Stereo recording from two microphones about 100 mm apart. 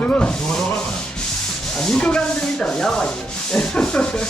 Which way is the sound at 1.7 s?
10° left (ahead or behind).